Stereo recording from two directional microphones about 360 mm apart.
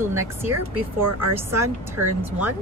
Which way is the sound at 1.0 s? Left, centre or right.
Right.